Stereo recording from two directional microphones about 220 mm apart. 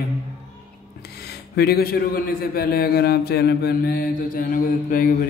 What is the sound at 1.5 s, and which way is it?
Mantra, 45° left (ahead or behind).